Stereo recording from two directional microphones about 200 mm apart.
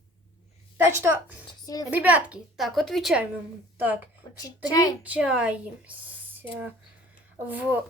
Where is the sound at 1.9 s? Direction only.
10° right (ahead or behind).